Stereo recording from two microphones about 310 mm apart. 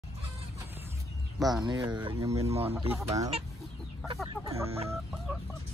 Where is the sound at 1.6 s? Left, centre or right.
Centre.